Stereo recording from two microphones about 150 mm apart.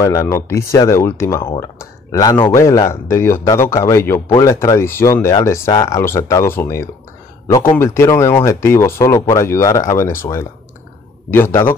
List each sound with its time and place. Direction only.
0.0 s speech: 20° left (ahead or behind)